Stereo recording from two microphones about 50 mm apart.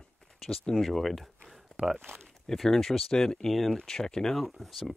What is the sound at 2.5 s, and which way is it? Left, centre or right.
Speech, centre.